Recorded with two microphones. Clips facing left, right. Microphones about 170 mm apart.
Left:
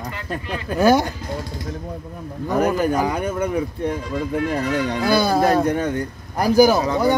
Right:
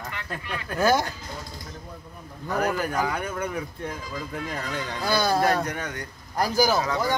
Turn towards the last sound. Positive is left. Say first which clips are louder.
# left 7 dB
turn(degrees=20)  # may be behind; listen again after turning